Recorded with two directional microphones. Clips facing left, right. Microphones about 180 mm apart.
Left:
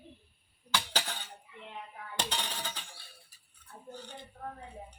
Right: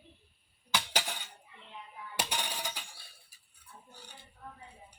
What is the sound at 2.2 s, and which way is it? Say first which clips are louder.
Music: even; 10° right (ahead or behind).